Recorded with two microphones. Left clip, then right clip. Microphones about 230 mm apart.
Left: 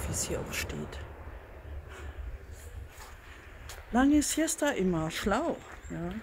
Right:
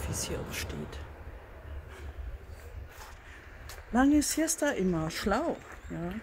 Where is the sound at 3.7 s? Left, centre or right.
Centre.